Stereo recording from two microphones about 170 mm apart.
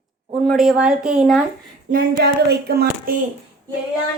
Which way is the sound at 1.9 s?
65° right (ahead or behind).